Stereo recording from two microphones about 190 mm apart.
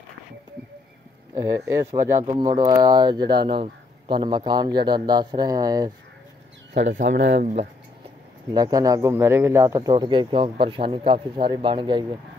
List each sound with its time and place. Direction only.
1.3 s speech: 15° right (ahead or behind)
6.9 s speech: 40° right (ahead or behind)
8.5 s speech: 20° right (ahead or behind)